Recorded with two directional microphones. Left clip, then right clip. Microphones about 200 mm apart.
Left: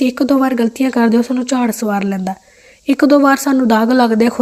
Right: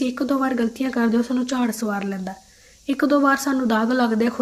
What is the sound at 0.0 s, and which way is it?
A woman's voice, 40° left (ahead or behind).